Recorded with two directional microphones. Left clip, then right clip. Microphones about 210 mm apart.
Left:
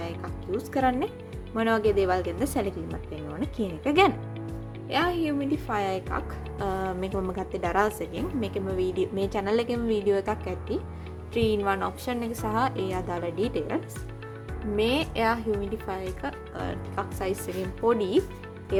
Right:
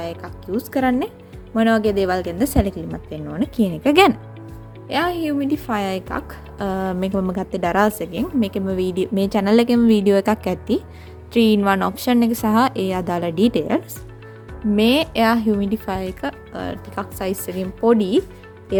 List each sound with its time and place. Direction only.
0.0 s a woman's voice: 40° right (ahead or behind)